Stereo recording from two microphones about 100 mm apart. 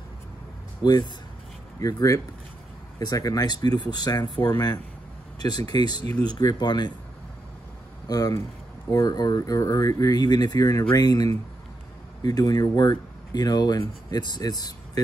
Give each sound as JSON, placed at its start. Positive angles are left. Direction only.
{"t": 0.8, "sound": "speech", "side_deg": 45}
{"t": 8.1, "sound": "speech", "side_deg": 40}